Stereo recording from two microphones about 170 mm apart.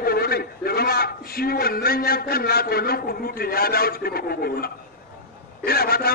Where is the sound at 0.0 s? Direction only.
65° left (ahead or behind).